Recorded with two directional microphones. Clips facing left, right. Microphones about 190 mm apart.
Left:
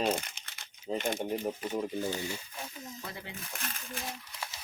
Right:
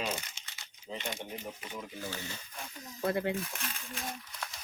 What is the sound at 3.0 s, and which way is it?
Speech, 55° right (ahead or behind).